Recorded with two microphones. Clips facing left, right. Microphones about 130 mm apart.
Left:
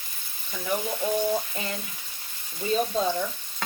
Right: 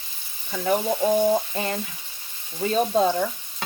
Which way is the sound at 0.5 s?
55° right (ahead or behind).